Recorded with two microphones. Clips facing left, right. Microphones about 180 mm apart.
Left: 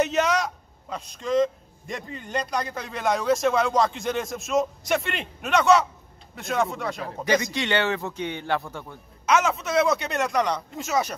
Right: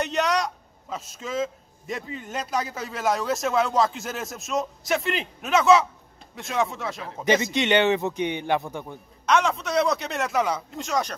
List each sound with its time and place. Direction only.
0.0 s a man's voice: centre (ahead or behind)
7.2 s speech: 20° right (ahead or behind)
9.2 s a man's voice: 5° left (ahead or behind)